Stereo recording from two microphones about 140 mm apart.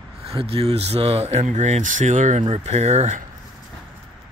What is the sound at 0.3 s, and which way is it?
Speech, 45° right (ahead or behind).